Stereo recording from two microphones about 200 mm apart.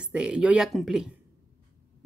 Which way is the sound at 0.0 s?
5° right (ahead or behind).